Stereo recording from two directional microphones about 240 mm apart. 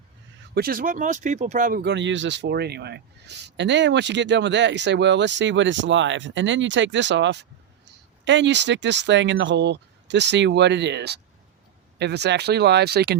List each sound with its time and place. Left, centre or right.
0.5 s speech: right